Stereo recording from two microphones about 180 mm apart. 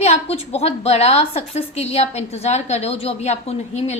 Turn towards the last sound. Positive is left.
turn(degrees=40)  # may be behind; listen again after turning